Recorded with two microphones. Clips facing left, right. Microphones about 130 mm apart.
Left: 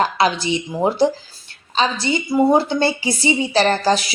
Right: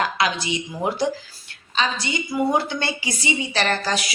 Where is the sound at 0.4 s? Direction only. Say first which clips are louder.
Left 6 dB; 30° left (ahead or behind).